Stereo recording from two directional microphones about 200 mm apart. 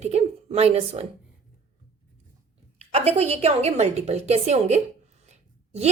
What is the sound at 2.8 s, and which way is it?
A woman's voice, 30° right (ahead or behind).